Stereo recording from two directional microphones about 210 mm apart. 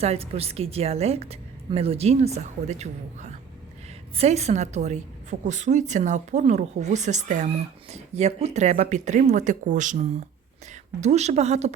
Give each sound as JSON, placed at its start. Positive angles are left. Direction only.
{"t": 0.0, "sound": "a woman's voice", "side_deg": -30}